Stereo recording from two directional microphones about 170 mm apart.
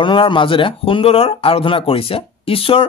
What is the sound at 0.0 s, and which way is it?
Speech, 30° left (ahead or behind).